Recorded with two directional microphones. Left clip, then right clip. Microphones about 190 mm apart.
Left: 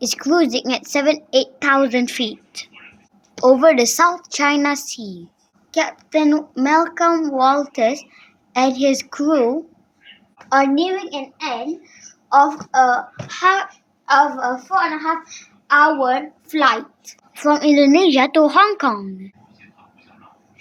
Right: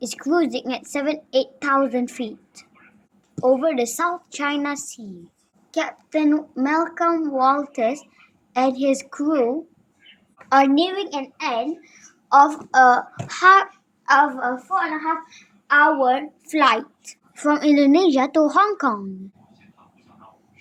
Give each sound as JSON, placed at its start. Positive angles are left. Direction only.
{"t": 0.0, "sound": "a child's voice", "side_deg": 20}
{"t": 3.4, "sound": "a woman's voice", "side_deg": 35}
{"t": 5.7, "sound": "a child's voice", "side_deg": 10}
{"t": 10.5, "sound": "a woman's voice", "side_deg": -35}
{"t": 14.7, "sound": "a woman's voice", "side_deg": -5}
{"t": 16.5, "sound": "a child's voice", "side_deg": -25}
{"t": 17.3, "sound": "a woman's voice", "side_deg": 0}